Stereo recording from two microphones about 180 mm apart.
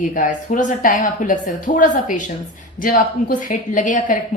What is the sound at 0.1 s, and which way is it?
A woman's voice, 45° left (ahead or behind).